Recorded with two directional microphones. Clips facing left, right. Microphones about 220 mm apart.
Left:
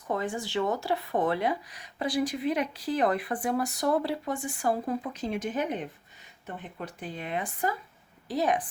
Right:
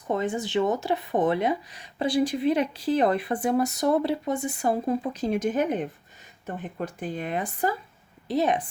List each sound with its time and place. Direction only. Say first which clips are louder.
0.1 s speech: right 4 dB; 20° right (ahead or behind)
5.1 s speech: right 6 dB; 40° right (ahead or behind)
8.3 s speech: right 3 dB; 25° right (ahead or behind)